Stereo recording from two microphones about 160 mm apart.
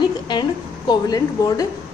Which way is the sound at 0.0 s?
30° left (ahead or behind).